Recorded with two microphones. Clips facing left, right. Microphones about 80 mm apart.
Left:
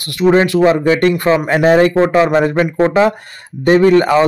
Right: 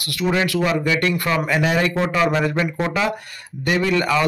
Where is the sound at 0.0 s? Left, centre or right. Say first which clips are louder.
Left 9 dB; left.